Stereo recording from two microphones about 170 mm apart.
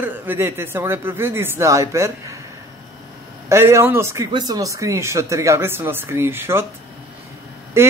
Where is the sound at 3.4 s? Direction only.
15° right (ahead or behind).